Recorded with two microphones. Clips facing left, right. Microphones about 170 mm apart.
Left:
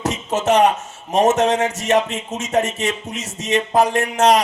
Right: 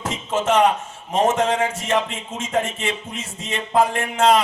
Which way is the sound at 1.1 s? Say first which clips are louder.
Left 3 dB; 40° left (ahead or behind).